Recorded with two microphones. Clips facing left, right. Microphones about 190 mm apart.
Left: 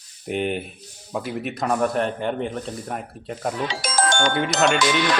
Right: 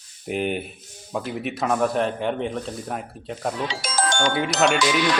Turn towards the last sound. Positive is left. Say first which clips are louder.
# even
turn(degrees=50)  # may be behind; listen again after turning